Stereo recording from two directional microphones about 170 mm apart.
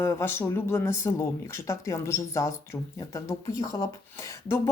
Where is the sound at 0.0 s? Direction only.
15° left (ahead or behind).